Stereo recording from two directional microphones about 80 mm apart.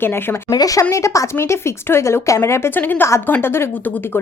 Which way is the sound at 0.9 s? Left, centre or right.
Left.